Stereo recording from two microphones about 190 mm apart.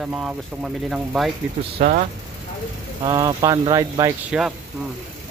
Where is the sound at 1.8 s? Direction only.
35° right (ahead or behind).